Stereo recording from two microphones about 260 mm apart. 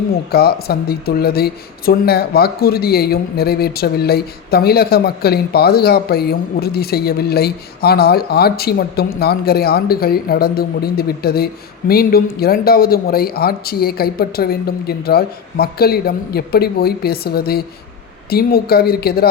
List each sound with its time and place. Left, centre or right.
0.3 s speech: left